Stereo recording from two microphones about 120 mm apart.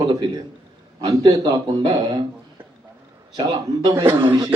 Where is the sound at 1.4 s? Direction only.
45° right (ahead or behind).